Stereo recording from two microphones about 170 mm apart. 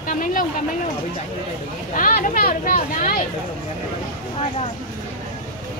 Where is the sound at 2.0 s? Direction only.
55° left (ahead or behind).